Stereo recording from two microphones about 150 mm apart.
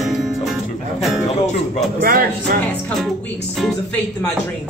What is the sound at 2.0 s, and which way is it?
Speech, 75° right (ahead or behind).